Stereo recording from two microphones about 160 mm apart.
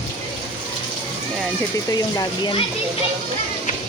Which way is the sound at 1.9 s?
25° left (ahead or behind).